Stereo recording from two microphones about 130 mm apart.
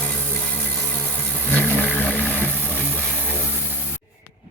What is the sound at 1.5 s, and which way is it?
Vehicle, 15° left (ahead or behind).